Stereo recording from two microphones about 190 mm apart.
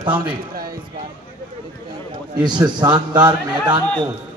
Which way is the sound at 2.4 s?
25° right (ahead or behind).